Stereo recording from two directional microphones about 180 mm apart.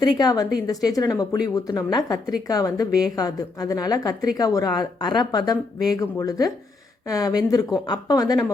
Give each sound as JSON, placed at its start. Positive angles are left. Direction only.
{"t": 0.2, "sound": "a woman's voice", "side_deg": 20}